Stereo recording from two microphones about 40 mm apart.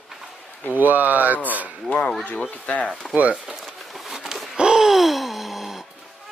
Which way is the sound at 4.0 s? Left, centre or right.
Centre.